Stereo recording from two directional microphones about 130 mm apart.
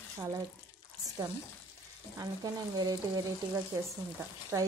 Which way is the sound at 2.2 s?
30° right (ahead or behind).